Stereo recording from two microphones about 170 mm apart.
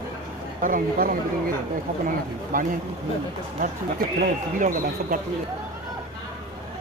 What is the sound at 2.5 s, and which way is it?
Speech, 55° right (ahead or behind).